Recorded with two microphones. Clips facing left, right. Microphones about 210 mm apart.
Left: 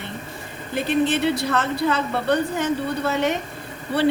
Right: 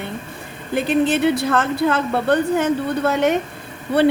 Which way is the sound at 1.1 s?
50° right (ahead or behind).